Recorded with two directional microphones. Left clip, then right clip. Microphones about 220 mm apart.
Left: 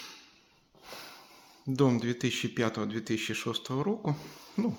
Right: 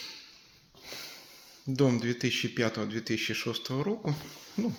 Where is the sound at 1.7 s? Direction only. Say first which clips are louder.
Even; 5° left (ahead or behind).